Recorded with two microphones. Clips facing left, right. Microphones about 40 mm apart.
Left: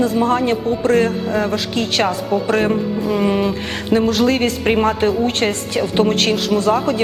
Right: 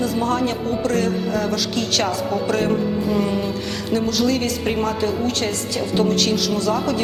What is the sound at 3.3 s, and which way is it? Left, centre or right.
Speech, left.